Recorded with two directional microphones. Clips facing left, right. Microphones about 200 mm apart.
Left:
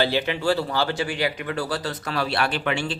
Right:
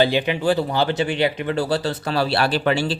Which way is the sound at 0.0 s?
15° right (ahead or behind).